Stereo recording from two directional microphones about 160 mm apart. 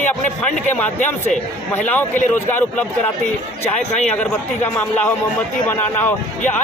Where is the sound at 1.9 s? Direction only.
10° left (ahead or behind).